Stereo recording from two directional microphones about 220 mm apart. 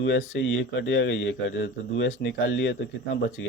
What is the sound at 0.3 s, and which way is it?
Speech, 55° left (ahead or behind).